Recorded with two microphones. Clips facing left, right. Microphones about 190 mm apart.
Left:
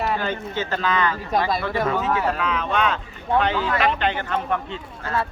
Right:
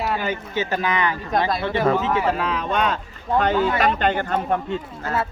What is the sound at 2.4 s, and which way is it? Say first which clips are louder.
Speech: even; 35° right (ahead or behind).